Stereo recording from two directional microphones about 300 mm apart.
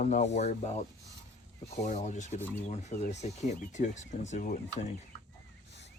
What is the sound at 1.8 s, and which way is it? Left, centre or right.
Speech, left.